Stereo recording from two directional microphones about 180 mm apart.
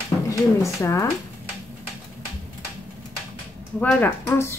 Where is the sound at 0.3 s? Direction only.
15° left (ahead or behind).